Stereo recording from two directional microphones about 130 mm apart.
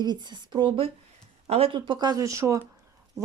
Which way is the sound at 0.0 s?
35° right (ahead or behind).